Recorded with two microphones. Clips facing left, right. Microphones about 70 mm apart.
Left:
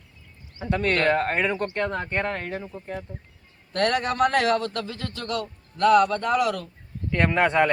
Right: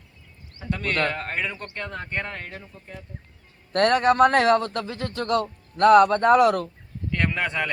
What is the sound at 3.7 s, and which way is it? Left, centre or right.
A man's voice, right.